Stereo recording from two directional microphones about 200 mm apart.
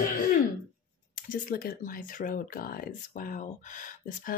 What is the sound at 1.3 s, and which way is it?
Speech, 45° left (ahead or behind).